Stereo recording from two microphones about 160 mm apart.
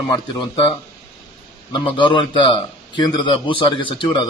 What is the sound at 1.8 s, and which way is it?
A man's voice, 30° left (ahead or behind).